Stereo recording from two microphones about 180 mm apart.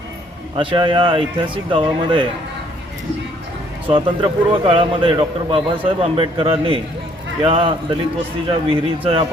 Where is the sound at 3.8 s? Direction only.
30° right (ahead or behind).